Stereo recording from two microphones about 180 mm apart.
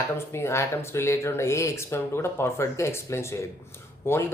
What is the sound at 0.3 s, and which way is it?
Speech, 15° left (ahead or behind).